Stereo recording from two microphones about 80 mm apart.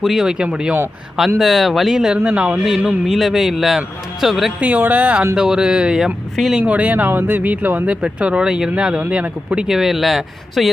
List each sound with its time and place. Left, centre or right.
0.0 s speech: centre
4.6 s speech: centre
5.3 s speech: centre
6.6 s speech: centre
9.6 s speech: centre